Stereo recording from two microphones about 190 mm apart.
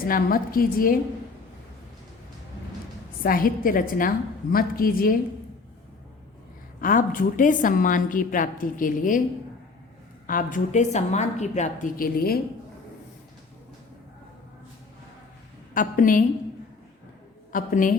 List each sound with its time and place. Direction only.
0.1 s a woman's voice: 50° left (ahead or behind)
3.2 s a woman's voice: 50° left (ahead or behind)
6.8 s a woman's voice: 45° left (ahead or behind)
10.2 s a woman's voice: 45° left (ahead or behind)
15.7 s a woman's voice: 45° left (ahead or behind)
17.5 s a woman's voice: 45° left (ahead or behind)